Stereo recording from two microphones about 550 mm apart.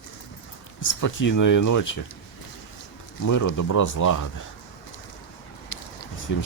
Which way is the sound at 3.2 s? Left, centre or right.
Left.